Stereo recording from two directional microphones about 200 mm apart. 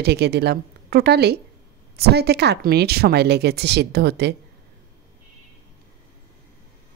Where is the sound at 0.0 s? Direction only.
55° right (ahead or behind).